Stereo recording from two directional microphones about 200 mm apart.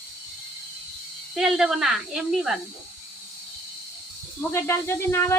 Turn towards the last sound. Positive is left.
turn(degrees=15)  # may be behind; listen again after turning